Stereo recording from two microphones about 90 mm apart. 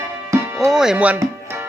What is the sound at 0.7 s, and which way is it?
Speech, 5° right (ahead or behind).